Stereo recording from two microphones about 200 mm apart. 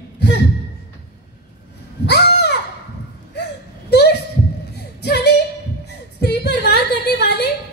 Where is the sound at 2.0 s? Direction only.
55° left (ahead or behind).